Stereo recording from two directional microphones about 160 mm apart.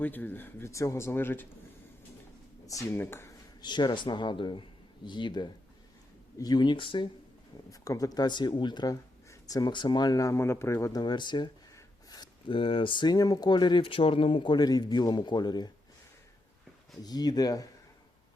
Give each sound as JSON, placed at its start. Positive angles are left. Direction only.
{"t": 0.0, "sound": "speech", "side_deg": 10}
{"t": 2.6, "sound": "speech", "side_deg": 15}
{"t": 3.6, "sound": "speech", "side_deg": 30}
{"t": 17.0, "sound": "speech", "side_deg": 25}